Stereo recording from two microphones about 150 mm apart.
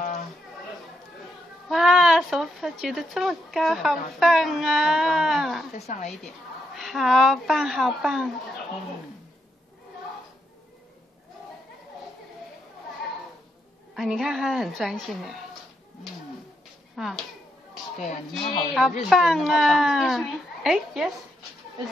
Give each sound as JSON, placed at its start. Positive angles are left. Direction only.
{"t": 1.7, "sound": "speech", "side_deg": 0}
{"t": 5.8, "sound": "a woman's voice", "side_deg": 45}
{"t": 6.7, "sound": "speech", "side_deg": 0}
{"t": 13.9, "sound": "speech", "side_deg": 0}
{"t": 16.9, "sound": "speech", "side_deg": 0}
{"t": 18.3, "sound": "speech", "side_deg": 0}